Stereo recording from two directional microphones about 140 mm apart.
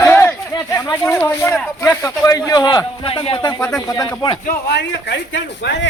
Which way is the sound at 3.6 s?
20° left (ahead or behind).